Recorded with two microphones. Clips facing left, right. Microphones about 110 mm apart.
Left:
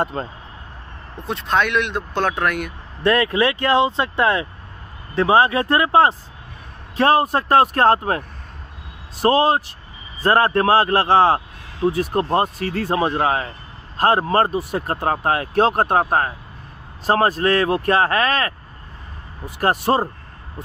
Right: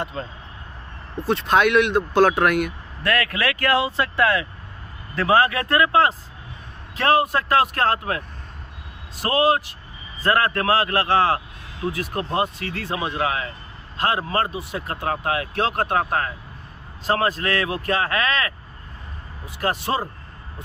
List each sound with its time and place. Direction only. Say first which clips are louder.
0.0 s speech: left 6 dB; 40° left (ahead or behind)
1.2 s speech: right 2 dB; 5° right (ahead or behind)
3.0 s a man's voice: left 6 dB; 25° left (ahead or behind)
9.2 s a man's voice: left 3 dB; 30° left (ahead or behind)
19.6 s speech: left 6 dB; 45° left (ahead or behind)